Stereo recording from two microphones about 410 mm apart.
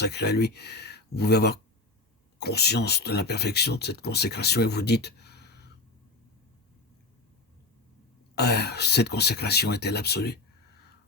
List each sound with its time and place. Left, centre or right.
0.0 s speech: left
8.4 s speech: left